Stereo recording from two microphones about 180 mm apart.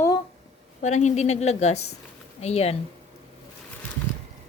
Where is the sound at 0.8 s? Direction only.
40° left (ahead or behind).